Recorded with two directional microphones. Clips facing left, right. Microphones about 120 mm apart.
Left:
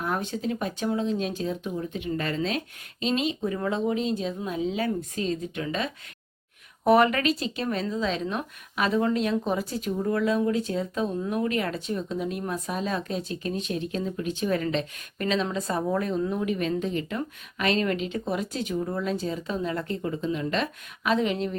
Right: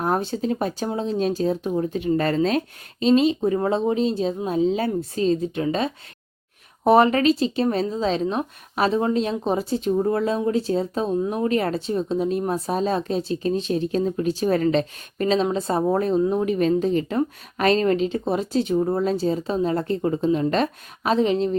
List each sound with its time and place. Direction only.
0.0 s speech: 35° right (ahead or behind)